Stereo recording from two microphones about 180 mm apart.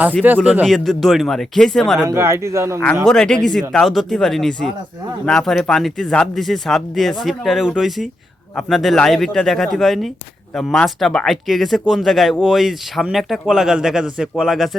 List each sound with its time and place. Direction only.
0.2 s speech: 10° right (ahead or behind)
0.6 s speech: centre (ahead or behind)
2.0 s speech: 15° right (ahead or behind)
3.1 s speech: 5° left (ahead or behind)